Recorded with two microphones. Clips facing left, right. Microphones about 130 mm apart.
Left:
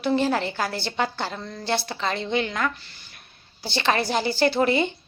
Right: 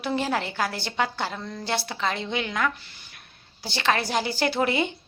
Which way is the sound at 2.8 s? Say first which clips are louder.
Even; 15° right (ahead or behind).